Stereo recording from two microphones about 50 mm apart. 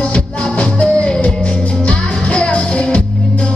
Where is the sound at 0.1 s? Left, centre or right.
Left.